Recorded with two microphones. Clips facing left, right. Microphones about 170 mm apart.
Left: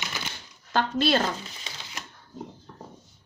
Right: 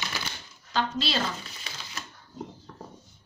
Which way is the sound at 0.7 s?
50° left (ahead or behind).